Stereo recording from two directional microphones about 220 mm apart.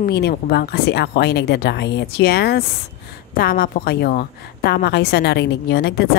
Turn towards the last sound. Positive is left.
turn(degrees=50)  # may be behind; listen again after turning